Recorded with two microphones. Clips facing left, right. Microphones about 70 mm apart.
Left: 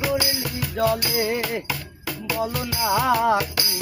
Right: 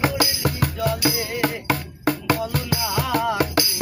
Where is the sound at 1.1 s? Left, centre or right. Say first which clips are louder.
Left 5 dB; left.